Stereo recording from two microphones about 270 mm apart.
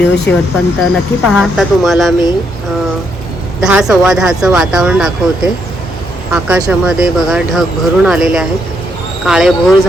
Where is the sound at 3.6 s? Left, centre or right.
Centre.